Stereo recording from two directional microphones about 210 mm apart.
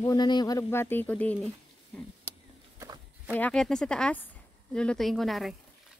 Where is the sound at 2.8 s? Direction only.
15° right (ahead or behind).